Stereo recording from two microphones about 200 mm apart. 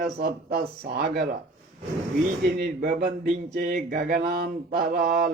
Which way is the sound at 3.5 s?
45° right (ahead or behind).